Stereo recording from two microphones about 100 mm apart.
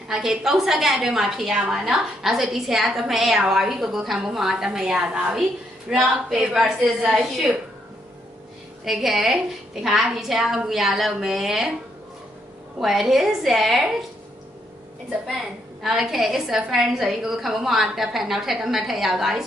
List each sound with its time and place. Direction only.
0.1 s a woman's voice: 5° right (ahead or behind)
8.8 s a woman's voice: centre (ahead or behind)
12.8 s a woman's voice: centre (ahead or behind)
15.2 s a woman's voice: 5° right (ahead or behind)